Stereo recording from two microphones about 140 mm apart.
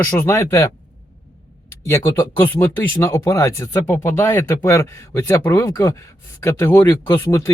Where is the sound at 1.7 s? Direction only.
20° left (ahead or behind).